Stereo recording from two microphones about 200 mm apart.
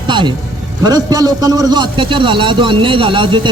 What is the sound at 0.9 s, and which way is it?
A man's voice, 20° right (ahead or behind).